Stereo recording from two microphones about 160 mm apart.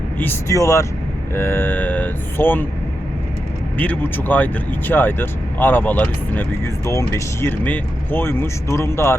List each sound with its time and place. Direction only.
0.2 s speech: 15° left (ahead or behind)
3.8 s speech: 10° left (ahead or behind)